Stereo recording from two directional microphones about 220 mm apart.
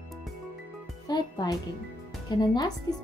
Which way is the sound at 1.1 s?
20° left (ahead or behind).